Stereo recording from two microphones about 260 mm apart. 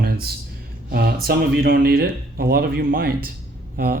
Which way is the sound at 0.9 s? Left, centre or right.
Right.